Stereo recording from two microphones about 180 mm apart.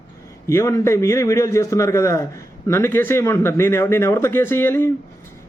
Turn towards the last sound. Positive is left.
turn(degrees=15)  # may be behind; listen again after turning